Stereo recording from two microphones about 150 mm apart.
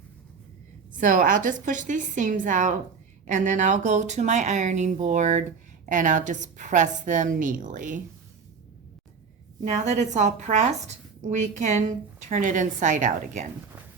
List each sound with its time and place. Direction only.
0.9 s speech: 60° right (ahead or behind)
9.6 s speech: 50° right (ahead or behind)